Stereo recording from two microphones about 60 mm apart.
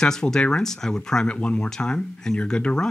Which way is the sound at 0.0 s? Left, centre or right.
Centre.